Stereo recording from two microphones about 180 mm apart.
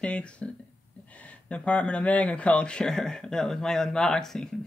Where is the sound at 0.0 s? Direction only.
5° left (ahead or behind).